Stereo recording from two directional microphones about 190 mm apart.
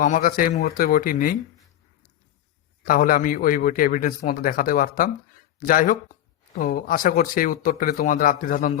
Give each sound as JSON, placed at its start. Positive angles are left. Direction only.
{"t": 0.0, "sound": "speech", "side_deg": 45}
{"t": 2.8, "sound": "speech", "side_deg": 50}